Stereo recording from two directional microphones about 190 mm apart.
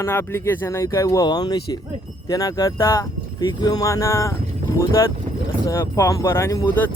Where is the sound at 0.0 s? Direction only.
10° left (ahead or behind).